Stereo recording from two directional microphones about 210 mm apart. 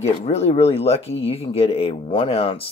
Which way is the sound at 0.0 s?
30° left (ahead or behind).